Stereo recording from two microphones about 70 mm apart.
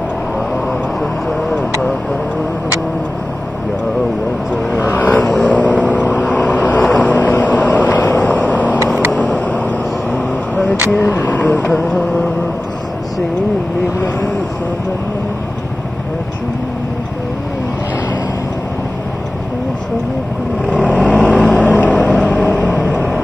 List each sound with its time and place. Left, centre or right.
1.5 s vehicle: centre
4.7 s vehicle: left
10.9 s vehicle: left
11.7 s a sound: centre
20.7 s vehicle: left